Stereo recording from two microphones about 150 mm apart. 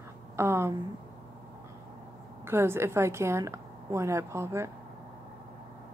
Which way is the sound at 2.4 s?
15° right (ahead or behind).